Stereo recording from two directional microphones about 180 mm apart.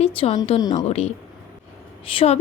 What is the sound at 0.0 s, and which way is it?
Speech, 30° left (ahead or behind).